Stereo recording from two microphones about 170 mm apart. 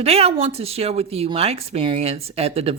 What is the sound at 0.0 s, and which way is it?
Speech, 35° right (ahead or behind).